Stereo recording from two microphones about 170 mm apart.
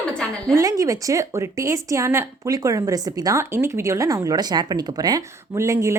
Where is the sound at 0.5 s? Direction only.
20° right (ahead or behind).